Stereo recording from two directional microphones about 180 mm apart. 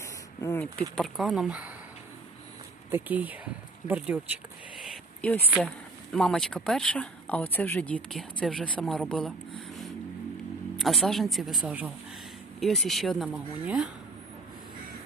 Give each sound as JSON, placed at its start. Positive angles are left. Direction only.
{"t": 0.0, "sound": "speech", "side_deg": 15}
{"t": 2.9, "sound": "speech", "side_deg": -10}
{"t": 4.8, "sound": "a sound", "side_deg": 0}
{"t": 6.1, "sound": "speech", "side_deg": 5}